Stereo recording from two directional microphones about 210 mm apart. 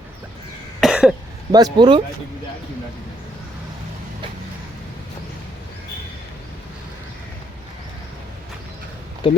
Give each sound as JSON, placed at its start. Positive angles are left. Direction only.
{"t": 0.8, "sound": "cough", "side_deg": 0}
{"t": 1.5, "sound": "speech", "side_deg": -20}
{"t": 9.2, "sound": "speech", "side_deg": 25}